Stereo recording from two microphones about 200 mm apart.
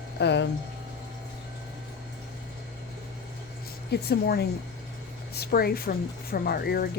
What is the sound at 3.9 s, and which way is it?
Speech, 55° left (ahead or behind).